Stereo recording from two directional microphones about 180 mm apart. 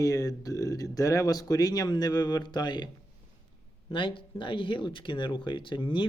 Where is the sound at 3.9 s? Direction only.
25° left (ahead or behind).